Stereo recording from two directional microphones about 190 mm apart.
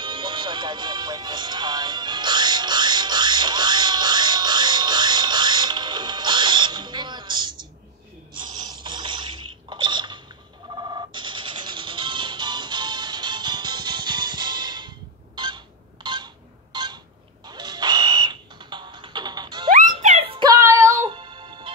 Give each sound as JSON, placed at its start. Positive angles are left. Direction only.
{"t": 0.0, "sound": "music", "side_deg": -25}
{"t": 8.3, "sound": "a sound", "side_deg": -25}
{"t": 10.8, "sound": "music", "side_deg": -20}
{"t": 16.7, "sound": "a sound", "side_deg": -25}
{"t": 17.5, "sound": "music", "side_deg": -20}
{"t": 20.0, "sound": "music", "side_deg": -35}